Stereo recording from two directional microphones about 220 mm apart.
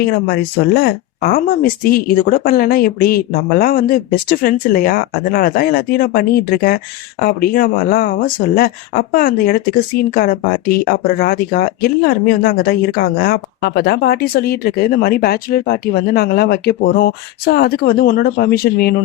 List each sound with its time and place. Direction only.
0.0 s speech: 45° left (ahead or behind)